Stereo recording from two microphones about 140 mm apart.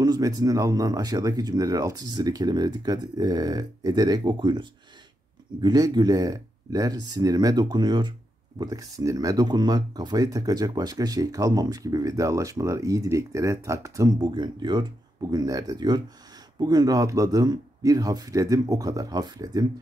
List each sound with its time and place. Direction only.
0.0 s speech: 30° right (ahead or behind)